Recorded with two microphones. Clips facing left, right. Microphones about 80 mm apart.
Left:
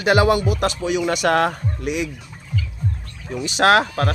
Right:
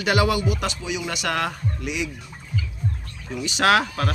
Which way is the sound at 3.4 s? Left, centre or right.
Left.